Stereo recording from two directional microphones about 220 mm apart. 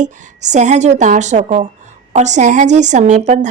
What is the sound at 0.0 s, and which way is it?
Speech, 35° right (ahead or behind).